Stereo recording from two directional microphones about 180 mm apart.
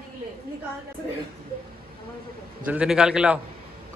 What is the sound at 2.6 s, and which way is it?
Speech, 5° right (ahead or behind).